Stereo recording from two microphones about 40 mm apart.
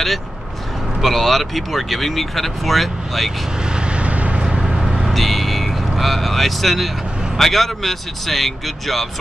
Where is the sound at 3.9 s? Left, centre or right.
Right.